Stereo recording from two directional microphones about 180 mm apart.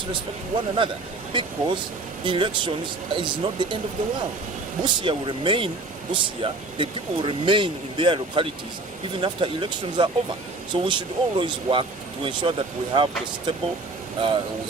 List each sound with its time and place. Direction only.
0.1 s speech: 25° right (ahead or behind)
4.8 s speech: 25° right (ahead or behind)